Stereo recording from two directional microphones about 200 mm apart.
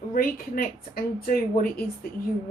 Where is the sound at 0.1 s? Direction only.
45° left (ahead or behind).